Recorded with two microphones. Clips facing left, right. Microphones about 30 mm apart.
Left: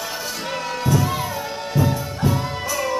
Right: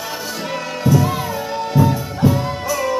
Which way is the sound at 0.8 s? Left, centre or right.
Centre.